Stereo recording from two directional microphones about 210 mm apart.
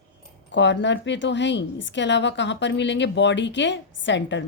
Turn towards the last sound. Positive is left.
turn(degrees=60)  # may be behind; listen again after turning